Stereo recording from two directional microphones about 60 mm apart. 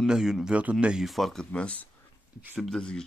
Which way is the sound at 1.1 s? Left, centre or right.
Centre.